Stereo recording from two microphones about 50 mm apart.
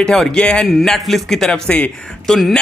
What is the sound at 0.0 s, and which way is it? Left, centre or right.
Speech, centre.